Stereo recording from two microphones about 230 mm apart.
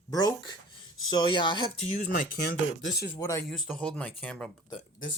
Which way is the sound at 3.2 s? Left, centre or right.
Centre.